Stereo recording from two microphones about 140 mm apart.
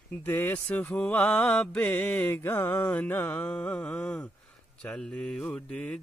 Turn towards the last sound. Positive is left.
turn(degrees=5)  # may be behind; listen again after turning